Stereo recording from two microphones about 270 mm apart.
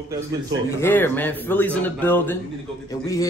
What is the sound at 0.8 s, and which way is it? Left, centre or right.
A man's voice, centre.